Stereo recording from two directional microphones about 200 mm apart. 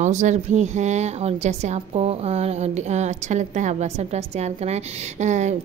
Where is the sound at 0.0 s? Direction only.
35° right (ahead or behind).